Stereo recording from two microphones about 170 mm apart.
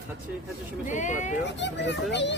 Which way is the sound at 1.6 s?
90° left.